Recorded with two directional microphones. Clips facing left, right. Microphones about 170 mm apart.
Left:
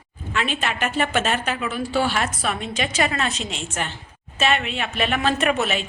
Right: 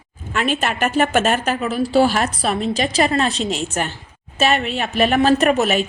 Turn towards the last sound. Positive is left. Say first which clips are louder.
# right 6 dB
turn(degrees=-40)  # may be behind; listen again after turning